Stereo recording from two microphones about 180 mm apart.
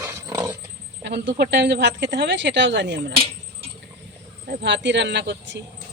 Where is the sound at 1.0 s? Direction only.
75° right (ahead or behind).